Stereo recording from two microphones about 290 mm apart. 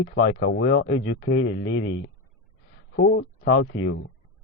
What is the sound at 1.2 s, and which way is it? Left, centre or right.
Speech, left.